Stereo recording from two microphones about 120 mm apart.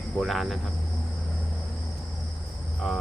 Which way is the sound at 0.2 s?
Centre (ahead or behind).